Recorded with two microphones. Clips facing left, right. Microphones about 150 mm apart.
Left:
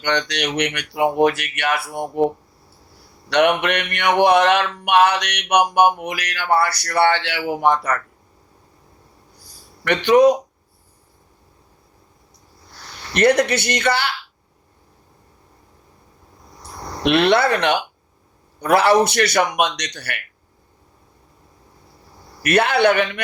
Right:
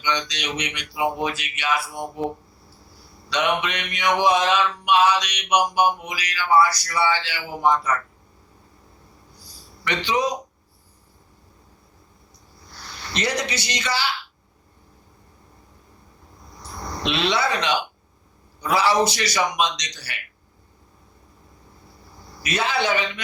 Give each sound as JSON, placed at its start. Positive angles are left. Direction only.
{"t": 0.0, "sound": "mantra", "side_deg": 60}
{"t": 3.2, "sound": "mantra", "side_deg": 60}
{"t": 9.8, "sound": "mantra", "side_deg": 55}
{"t": 13.1, "sound": "mantra", "side_deg": 60}
{"t": 17.0, "sound": "mantra", "side_deg": 60}
{"t": 22.4, "sound": "mantra", "side_deg": 60}